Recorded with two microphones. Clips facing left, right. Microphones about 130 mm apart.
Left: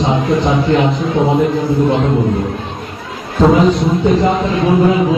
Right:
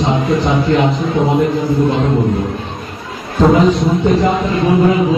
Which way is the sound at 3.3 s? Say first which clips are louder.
Even; centre (ahead or behind).